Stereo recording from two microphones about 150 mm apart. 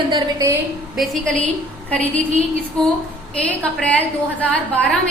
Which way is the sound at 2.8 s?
5° left (ahead or behind).